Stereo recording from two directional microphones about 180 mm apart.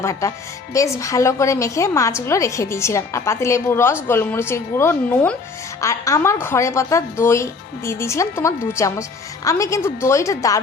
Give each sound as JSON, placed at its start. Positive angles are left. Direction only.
{"t": 0.0, "sound": "speech", "side_deg": 15}